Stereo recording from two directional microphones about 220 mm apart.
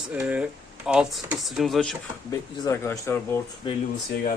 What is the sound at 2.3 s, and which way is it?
Speech, 15° left (ahead or behind).